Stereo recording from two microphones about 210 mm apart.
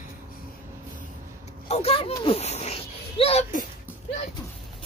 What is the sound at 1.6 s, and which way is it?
A child's voice, 30° left (ahead or behind).